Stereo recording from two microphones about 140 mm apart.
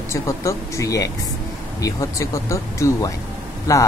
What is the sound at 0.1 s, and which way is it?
Speech, 20° left (ahead or behind).